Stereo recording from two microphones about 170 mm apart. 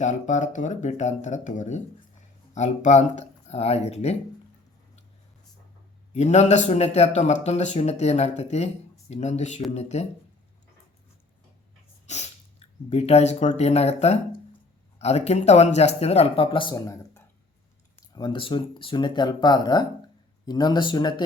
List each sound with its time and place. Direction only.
0.0 s speech: 45° left (ahead or behind)
6.1 s speech: 40° left (ahead or behind)
12.0 s speech: 40° left (ahead or behind)
18.1 s speech: 25° left (ahead or behind)